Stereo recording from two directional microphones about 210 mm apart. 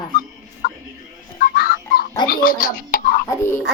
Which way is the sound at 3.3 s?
10° left (ahead or behind).